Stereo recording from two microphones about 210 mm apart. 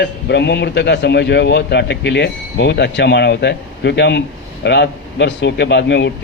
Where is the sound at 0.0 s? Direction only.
55° left (ahead or behind).